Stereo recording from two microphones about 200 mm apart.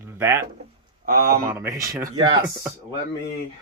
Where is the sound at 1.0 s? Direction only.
45° right (ahead or behind).